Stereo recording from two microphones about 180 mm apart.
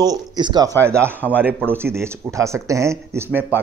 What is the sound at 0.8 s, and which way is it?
Speech, 15° right (ahead or behind).